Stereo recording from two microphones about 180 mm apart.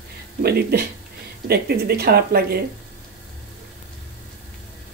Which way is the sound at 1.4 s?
60° right (ahead or behind).